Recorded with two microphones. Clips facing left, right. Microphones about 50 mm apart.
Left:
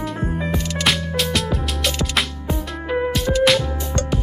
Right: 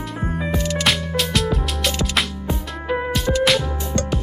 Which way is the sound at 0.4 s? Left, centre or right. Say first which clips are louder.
Right 3 dB; centre.